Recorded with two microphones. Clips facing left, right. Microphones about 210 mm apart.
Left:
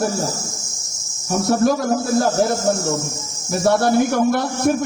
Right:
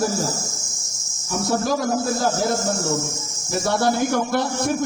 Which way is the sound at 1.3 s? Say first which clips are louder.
Left 5 dB; 60° left (ahead or behind).